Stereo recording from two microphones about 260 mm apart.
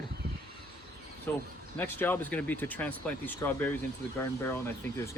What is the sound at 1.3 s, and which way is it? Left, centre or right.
Speech, centre.